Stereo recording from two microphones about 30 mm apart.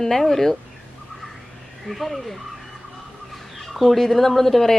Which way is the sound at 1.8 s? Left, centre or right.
Centre.